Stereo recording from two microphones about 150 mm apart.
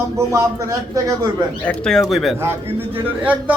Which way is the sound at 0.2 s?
20° right (ahead or behind).